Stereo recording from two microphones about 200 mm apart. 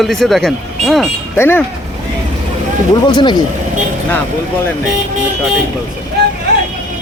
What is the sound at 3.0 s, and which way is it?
Speech, 25° left (ahead or behind).